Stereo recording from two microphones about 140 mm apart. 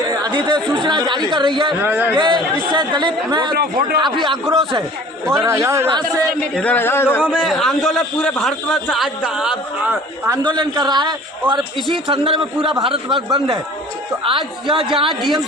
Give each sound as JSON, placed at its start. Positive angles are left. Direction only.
{"t": 0.1, "sound": "speech", "side_deg": -25}
{"t": 1.8, "sound": "a man's voice", "side_deg": -15}
{"t": 2.1, "sound": "a man's voice", "side_deg": -35}
{"t": 3.5, "sound": "a man's voice", "side_deg": -90}
{"t": 3.9, "sound": "a man's voice", "side_deg": -35}
{"t": 5.5, "sound": "a man's voice", "side_deg": -20}
{"t": 6.6, "sound": "speech", "side_deg": 10}
{"t": 7.3, "sound": "a man's voice", "side_deg": -5}
{"t": 10.2, "sound": "a man's voice", "side_deg": -30}
{"t": 14.3, "sound": "a man's voice", "side_deg": -35}
{"t": 15.2, "sound": "a man's voice", "side_deg": 0}